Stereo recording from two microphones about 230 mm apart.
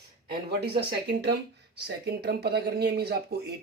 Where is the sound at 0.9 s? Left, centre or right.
Right.